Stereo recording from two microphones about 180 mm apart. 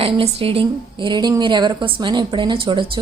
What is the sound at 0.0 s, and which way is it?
Speech, 30° right (ahead or behind).